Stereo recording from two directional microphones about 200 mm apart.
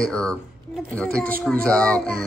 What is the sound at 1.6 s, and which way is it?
Speech, 5° left (ahead or behind).